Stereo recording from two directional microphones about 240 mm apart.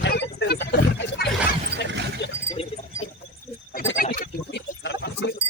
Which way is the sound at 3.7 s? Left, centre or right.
Left.